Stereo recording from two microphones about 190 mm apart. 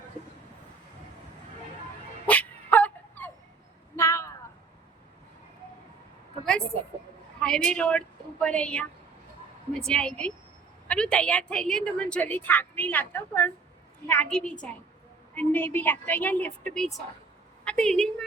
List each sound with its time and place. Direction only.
2.2 s dog: 10° left (ahead or behind)
3.9 s a sound: 15° left (ahead or behind)
7.3 s a woman's voice: 5° left (ahead or behind)